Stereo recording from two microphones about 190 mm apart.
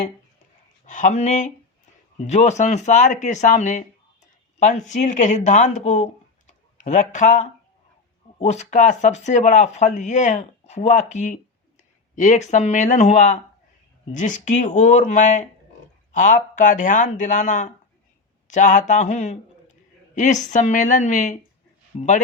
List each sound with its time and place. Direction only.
0.9 s speech: 40° left (ahead or behind)
6.5 s a sound: 40° left (ahead or behind)
8.4 s speech: 35° left (ahead or behind)